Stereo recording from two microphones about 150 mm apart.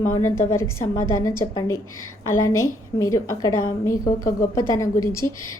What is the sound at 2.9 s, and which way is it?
A woman's voice, 20° left (ahead or behind).